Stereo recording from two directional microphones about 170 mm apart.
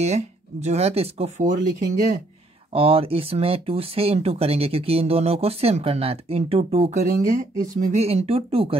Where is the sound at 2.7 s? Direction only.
35° right (ahead or behind).